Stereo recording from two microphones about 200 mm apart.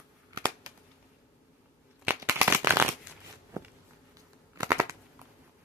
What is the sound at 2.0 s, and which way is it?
Shuffling cards, 10° right (ahead or behind).